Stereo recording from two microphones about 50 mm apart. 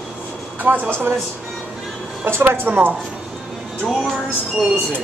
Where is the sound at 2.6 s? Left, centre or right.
Right.